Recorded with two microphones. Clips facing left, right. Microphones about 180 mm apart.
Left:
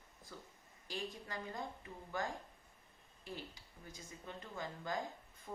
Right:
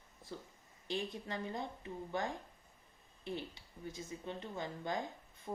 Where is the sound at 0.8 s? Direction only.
20° right (ahead or behind).